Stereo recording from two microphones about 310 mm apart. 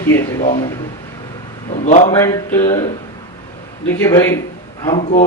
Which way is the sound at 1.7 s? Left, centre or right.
Left.